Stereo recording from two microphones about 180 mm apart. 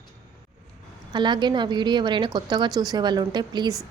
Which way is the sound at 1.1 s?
25° right (ahead or behind).